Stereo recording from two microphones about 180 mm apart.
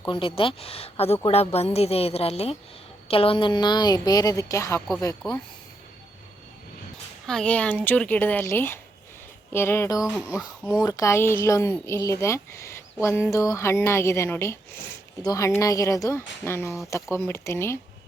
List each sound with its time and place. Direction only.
0.1 s a woman's voice: 30° left (ahead or behind)
7.3 s speech: 5° left (ahead or behind)